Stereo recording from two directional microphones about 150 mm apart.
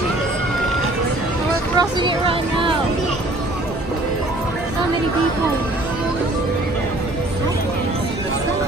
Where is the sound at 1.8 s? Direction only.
35° right (ahead or behind).